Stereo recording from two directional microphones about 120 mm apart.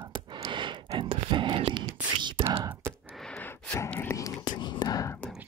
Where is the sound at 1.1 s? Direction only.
45° right (ahead or behind).